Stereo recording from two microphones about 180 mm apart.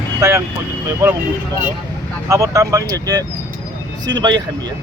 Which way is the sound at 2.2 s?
15° right (ahead or behind).